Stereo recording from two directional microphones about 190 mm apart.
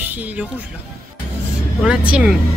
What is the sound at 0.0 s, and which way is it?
Speech, 10° right (ahead or behind).